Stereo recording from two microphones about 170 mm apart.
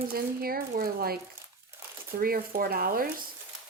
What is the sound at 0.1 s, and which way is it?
Speech, 60° right (ahead or behind).